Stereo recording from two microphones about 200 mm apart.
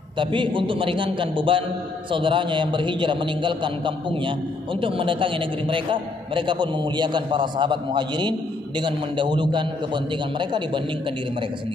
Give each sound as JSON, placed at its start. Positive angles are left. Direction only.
{"t": 0.2, "sound": "a man's voice", "side_deg": -25}